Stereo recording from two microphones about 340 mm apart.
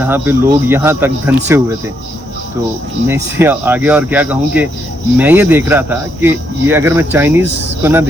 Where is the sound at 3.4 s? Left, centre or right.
Centre.